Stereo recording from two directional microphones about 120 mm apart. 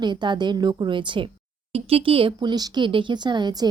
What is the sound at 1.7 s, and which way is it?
A woman's voice, 55° right (ahead or behind).